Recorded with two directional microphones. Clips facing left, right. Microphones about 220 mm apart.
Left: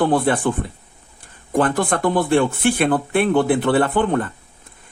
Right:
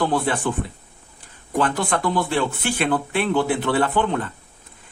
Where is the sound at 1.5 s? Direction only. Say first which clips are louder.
Left 3 dB; 50° left (ahead or behind).